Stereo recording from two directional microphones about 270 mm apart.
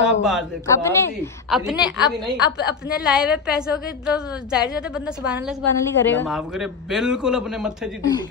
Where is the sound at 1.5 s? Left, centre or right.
Centre.